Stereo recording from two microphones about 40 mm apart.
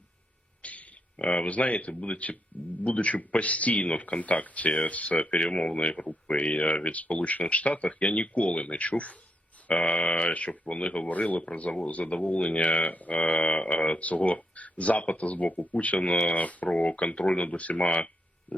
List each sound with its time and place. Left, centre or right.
0.6 s speech: left